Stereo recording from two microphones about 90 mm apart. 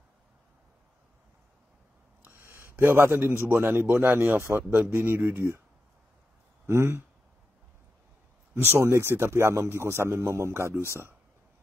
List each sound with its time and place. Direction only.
2.2 s a man's voice: 25° right (ahead or behind)
6.6 s speech: 30° right (ahead or behind)
8.7 s a man's voice: 30° right (ahead or behind)